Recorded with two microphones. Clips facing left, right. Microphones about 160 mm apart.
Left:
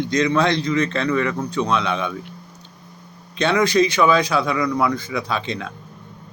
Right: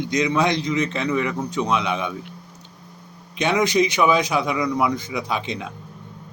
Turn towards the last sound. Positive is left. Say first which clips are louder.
# left 1 dB
turn(degrees=-15)  # may be behind; listen again after turning